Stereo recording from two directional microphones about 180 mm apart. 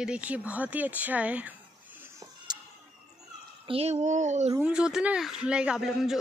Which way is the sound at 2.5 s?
25° right (ahead or behind).